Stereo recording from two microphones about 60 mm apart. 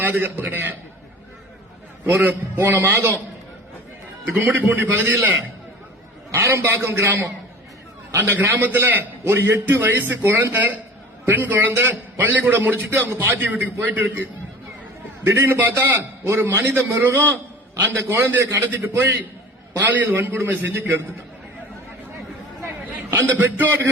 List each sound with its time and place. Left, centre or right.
0.0 s a man's voice: right
2.0 s a man's voice: right
4.3 s a man's voice: right
6.3 s a man's voice: right
8.2 s a man's voice: right
12.2 s a man's voice: right
15.2 s a man's voice: right
19.8 s a man's voice: right
23.4 s a man's voice: right